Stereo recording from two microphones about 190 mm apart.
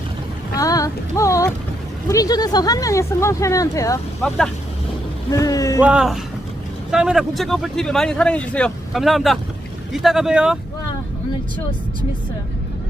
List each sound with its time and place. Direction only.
0.6 s a sound: 20° left (ahead or behind)
2.0 s speech: 20° left (ahead or behind)
4.2 s speech: 5° left (ahead or behind)
5.3 s speech: 20° left (ahead or behind)
5.8 s speech: 5° right (ahead or behind)